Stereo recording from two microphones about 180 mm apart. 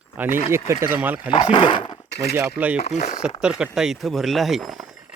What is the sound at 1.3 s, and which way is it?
Speech, 30° left (ahead or behind).